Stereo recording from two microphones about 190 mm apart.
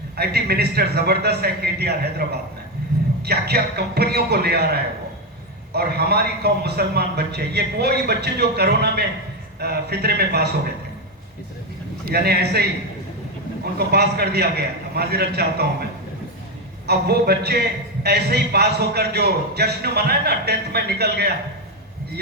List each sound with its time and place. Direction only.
0.2 s a man's voice: 55° right (ahead or behind)
12.0 s a man's voice: 55° right (ahead or behind)
13.7 s a man's voice: 55° right (ahead or behind)
16.8 s a man's voice: 55° right (ahead or behind)